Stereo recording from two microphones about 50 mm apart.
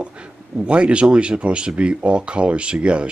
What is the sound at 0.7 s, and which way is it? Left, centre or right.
Speech, right.